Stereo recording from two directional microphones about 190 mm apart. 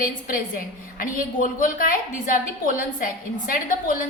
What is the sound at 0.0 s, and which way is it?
A woman's voice, 45° left (ahead or behind).